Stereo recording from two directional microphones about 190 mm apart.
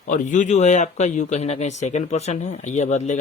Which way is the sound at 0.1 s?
40° left (ahead or behind).